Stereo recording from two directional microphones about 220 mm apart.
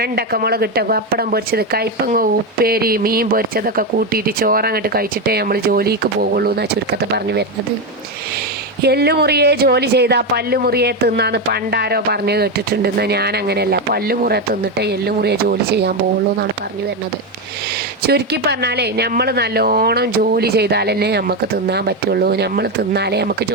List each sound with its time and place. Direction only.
0.0 s speech: 45° right (ahead or behind)
8.8 s speech: 45° right (ahead or behind)
18.0 s speech: 50° right (ahead or behind)